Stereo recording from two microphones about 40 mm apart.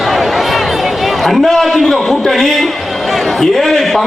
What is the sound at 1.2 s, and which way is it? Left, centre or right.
A man's voice, centre.